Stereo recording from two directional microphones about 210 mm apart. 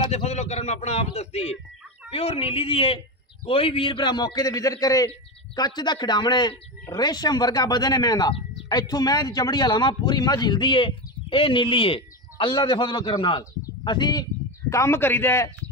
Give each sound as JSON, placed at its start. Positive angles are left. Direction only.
{"t": 0.0, "sound": "a man's voice", "side_deg": 30}